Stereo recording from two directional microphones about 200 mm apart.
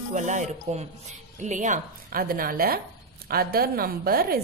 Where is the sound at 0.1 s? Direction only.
35° right (ahead or behind).